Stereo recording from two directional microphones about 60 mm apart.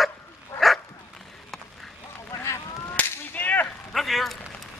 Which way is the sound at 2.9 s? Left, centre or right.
Left.